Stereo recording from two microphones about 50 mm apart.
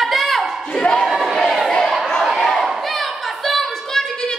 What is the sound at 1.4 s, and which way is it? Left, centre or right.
Crowd, centre.